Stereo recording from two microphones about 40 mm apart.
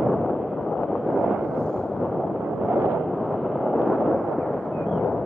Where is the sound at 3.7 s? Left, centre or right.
Centre.